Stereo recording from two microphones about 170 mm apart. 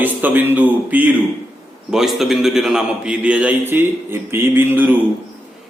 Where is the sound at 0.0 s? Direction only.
10° right (ahead or behind).